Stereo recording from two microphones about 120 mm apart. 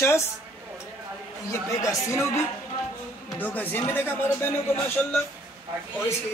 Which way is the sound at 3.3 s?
15° left (ahead or behind).